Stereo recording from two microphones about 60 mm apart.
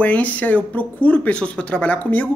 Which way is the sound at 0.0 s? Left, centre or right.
Left.